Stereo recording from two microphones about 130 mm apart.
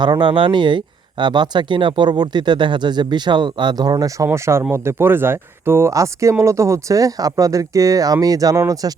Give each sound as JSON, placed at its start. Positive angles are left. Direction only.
{"t": 0.0, "sound": "speech", "side_deg": -35}